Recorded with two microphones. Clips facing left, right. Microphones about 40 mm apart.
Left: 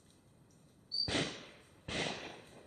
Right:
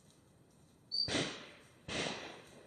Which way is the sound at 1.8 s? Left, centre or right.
Centre.